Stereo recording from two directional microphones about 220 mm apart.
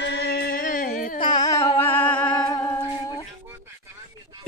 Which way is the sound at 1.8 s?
10° left (ahead or behind).